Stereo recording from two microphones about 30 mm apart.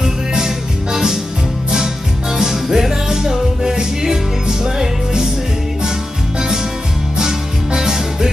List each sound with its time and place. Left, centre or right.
0.9 s music: centre
2.3 s music: centre
7.2 s music: centre